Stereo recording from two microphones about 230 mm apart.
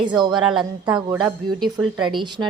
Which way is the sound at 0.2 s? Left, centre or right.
Centre.